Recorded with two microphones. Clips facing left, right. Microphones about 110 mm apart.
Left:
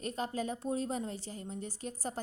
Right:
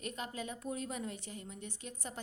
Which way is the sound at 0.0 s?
35° left (ahead or behind).